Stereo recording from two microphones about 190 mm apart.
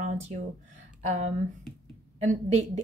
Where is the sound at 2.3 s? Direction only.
40° right (ahead or behind).